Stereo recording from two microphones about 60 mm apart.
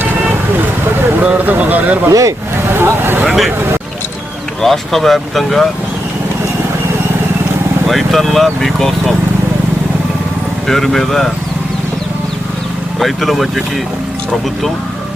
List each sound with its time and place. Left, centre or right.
1.2 s speech: right
2.0 s speech: right
2.7 s speech: right
3.2 s speech: centre
4.6 s speech: centre
7.9 s speech: centre
10.7 s speech: centre
13.0 s speech: centre